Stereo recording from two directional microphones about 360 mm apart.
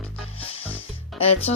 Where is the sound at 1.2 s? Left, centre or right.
Centre.